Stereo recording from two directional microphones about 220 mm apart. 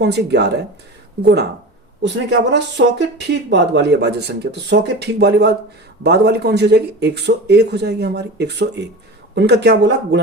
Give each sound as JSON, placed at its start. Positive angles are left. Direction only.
{"t": 0.0, "sound": "speech", "side_deg": -50}